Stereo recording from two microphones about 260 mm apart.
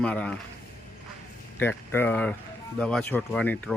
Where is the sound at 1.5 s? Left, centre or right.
Centre.